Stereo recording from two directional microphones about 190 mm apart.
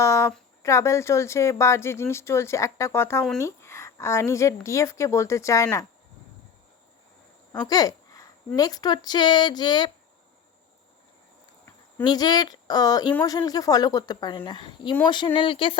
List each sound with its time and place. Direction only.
0.0 s speech: 15° left (ahead or behind)
7.6 s a sound: 20° left (ahead or behind)
8.5 s a woman's voice: 20° left (ahead or behind)
12.0 s a woman's voice: 20° left (ahead or behind)